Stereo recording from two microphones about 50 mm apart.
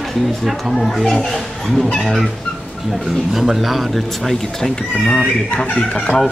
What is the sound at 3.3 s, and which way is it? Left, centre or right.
Speech, centre.